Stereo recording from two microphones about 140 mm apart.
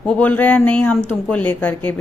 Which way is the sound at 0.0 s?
10° left (ahead or behind).